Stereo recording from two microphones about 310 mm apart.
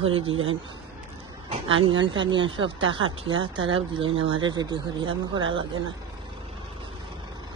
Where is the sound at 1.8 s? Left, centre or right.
Centre.